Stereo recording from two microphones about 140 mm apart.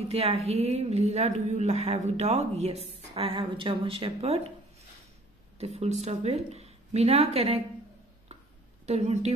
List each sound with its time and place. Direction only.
0.1 s a woman's voice: 45° right (ahead or behind)
5.6 s a woman's voice: 50° right (ahead or behind)
8.8 s a woman's voice: 55° right (ahead or behind)